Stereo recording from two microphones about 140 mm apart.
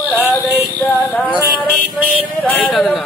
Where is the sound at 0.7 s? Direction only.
10° left (ahead or behind).